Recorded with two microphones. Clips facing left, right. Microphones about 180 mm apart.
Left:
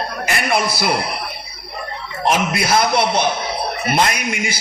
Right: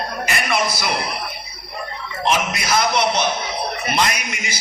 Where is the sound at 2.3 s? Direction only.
55° left (ahead or behind).